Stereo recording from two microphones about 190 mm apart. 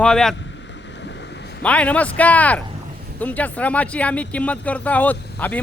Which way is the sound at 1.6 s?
5° left (ahead or behind).